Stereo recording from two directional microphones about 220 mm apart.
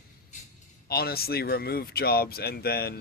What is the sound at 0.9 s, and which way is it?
Speech, 45° left (ahead or behind).